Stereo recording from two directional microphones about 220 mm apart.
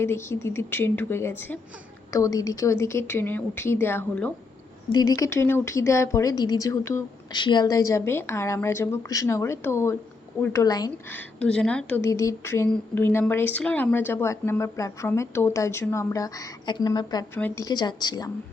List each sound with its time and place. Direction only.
0.0 s a woman's voice: 10° left (ahead or behind)